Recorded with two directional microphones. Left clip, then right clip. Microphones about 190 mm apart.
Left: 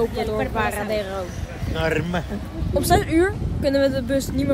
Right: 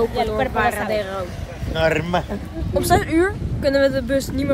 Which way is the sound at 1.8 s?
45° right (ahead or behind).